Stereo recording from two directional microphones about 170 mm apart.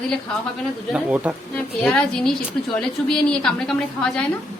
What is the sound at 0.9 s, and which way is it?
Speech, 10° right (ahead or behind).